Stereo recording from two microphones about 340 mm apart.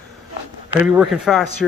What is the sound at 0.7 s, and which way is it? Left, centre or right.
Speech, centre.